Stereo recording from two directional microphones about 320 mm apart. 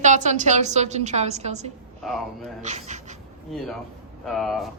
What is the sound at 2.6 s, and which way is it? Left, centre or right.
Speech, right.